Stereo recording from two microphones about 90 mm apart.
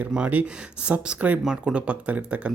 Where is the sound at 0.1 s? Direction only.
15° right (ahead or behind).